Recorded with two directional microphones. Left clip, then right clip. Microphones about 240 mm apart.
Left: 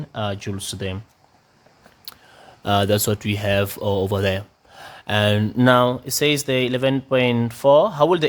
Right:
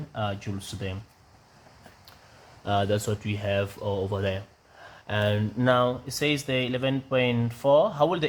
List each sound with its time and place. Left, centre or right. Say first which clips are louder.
0.1 s speech: left 5 dB; left
2.1 s a sound: left 16 dB; left
2.6 s speech: left 7 dB; left